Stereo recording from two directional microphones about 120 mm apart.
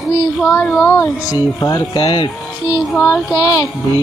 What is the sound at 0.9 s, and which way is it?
Speech, 25° left (ahead or behind).